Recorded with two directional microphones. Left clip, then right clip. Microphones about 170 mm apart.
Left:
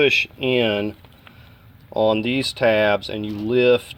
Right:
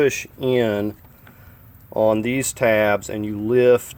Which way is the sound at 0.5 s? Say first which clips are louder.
Even; 5° right (ahead or behind).